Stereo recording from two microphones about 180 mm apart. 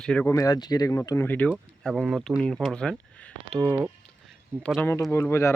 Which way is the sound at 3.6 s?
10° right (ahead or behind).